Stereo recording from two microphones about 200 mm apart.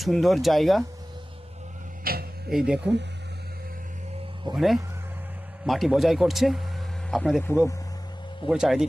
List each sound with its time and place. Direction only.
0.0 s speech: centre (ahead or behind)
2.1 s speech: 50° right (ahead or behind)
2.5 s speech: 5° right (ahead or behind)
4.5 s speech: centre (ahead or behind)
8.4 s speech: centre (ahead or behind)